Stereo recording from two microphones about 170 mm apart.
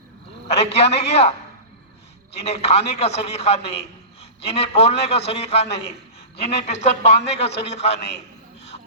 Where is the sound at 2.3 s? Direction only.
35° left (ahead or behind).